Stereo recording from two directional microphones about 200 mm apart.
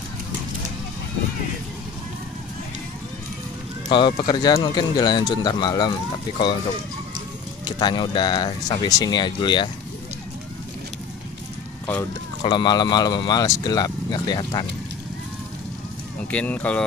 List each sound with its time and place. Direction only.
3.9 s speech: 20° left (ahead or behind)
7.6 s speech: 20° left (ahead or behind)
12.4 s speech: 20° left (ahead or behind)
16.3 s speech: 5° left (ahead or behind)